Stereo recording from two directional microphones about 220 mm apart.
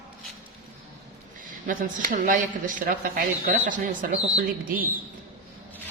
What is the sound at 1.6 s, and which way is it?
Speech, 35° right (ahead or behind).